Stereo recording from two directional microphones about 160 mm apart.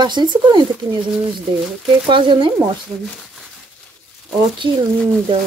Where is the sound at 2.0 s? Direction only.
30° right (ahead or behind).